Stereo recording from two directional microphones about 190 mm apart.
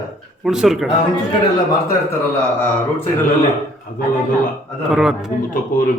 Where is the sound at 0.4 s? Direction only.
Centre (ahead or behind).